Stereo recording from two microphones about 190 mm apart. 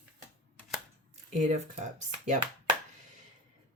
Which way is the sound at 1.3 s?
40° right (ahead or behind).